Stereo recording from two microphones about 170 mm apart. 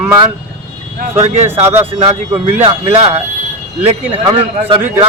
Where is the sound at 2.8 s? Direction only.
35° right (ahead or behind).